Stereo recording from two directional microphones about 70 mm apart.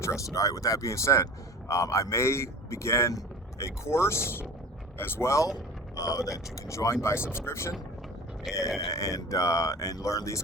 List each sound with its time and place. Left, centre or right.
0.0 s speech: left
6.0 s speech: left
8.5 s speech: centre
8.9 s speech: left